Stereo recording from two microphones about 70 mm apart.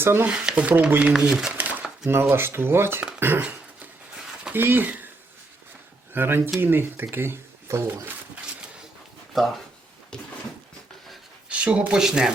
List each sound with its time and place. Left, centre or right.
0.0 s speech: right
0.3 s speech: centre
1.1 s speech: centre
1.5 s a sound: right
2.3 s speech: right
3.4 s dog: right
4.5 s speech: right
6.1 s speech: right
11.4 s a sound: centre
11.9 s speech: centre